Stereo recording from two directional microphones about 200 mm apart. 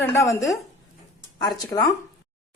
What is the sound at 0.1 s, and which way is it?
Speech, 15° left (ahead or behind).